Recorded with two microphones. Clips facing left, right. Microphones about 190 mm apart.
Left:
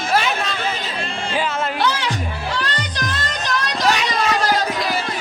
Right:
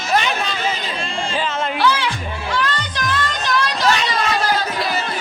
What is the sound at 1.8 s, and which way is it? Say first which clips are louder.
Music: right 2 dB; 40° left (ahead or behind).